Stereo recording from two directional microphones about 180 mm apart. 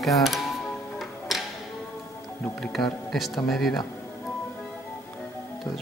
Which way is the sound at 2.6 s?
Centre (ahead or behind).